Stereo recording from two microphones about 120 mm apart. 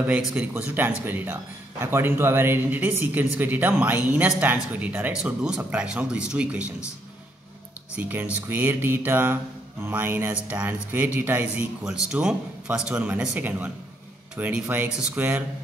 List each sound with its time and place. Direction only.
0.0 s a man's voice: 10° right (ahead or behind)
7.9 s speech: 15° right (ahead or behind)